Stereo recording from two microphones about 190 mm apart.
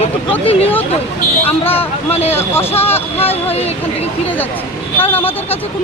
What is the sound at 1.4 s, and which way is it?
Speech, 10° left (ahead or behind).